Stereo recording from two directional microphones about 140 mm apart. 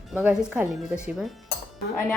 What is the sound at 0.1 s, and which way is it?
Speech, 10° right (ahead or behind).